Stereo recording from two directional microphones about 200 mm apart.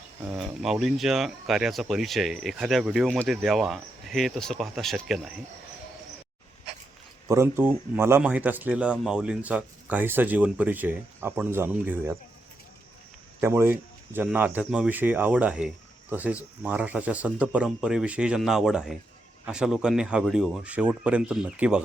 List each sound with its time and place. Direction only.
0.3 s speech: centre (ahead or behind)
7.3 s speech: 10° right (ahead or behind)
13.4 s speech: 15° right (ahead or behind)